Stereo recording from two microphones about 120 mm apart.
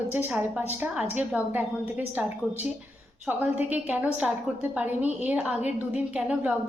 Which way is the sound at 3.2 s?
15° right (ahead or behind).